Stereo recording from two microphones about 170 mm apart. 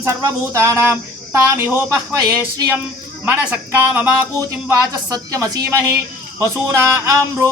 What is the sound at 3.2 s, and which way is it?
Speech, 10° right (ahead or behind).